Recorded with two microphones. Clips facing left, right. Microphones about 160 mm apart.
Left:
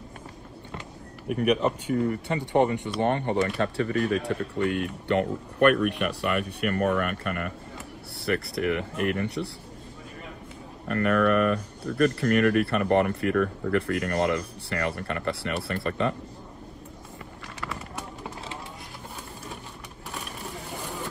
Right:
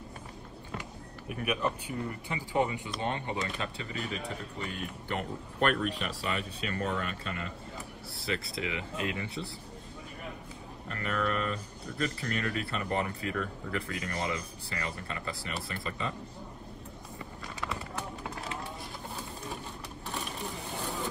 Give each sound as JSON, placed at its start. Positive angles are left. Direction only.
{"t": 1.9, "sound": "speech", "side_deg": 70}
{"t": 10.9, "sound": "speech", "side_deg": 70}